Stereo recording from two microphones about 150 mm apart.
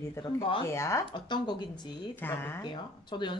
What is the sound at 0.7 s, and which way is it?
Speech, 20° left (ahead or behind).